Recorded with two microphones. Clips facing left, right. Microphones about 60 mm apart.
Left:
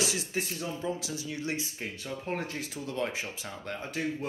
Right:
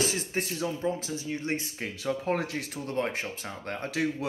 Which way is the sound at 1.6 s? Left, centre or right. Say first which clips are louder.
Right 2 dB; right.